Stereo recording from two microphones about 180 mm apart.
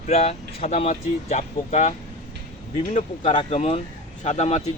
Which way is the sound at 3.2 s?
30° left (ahead or behind).